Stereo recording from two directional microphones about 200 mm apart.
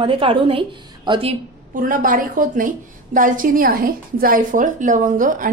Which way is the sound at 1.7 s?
45° right (ahead or behind).